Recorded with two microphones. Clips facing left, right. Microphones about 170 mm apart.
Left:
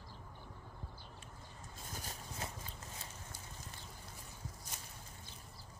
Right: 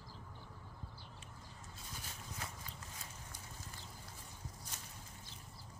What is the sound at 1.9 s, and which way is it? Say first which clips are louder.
Vehicle: left 4 dB; 40° left (ahead or behind).